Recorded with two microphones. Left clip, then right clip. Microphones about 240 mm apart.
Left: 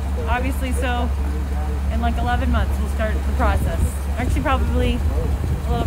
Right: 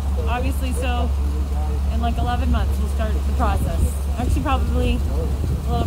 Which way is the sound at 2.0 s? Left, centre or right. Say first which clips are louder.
Left 2 dB; left.